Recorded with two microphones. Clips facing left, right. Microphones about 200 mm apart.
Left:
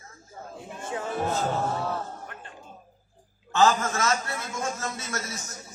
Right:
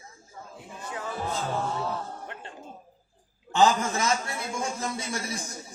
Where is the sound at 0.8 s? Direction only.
25° left (ahead or behind).